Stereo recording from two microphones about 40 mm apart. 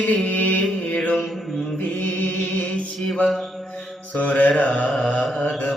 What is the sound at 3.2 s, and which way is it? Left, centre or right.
Mantra, centre.